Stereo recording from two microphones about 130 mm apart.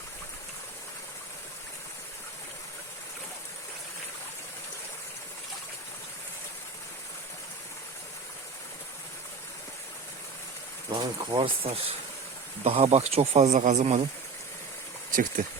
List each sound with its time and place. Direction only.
10.9 s speech: 40° right (ahead or behind)
12.6 s speech: 55° right (ahead or behind)
15.1 s speech: 90° right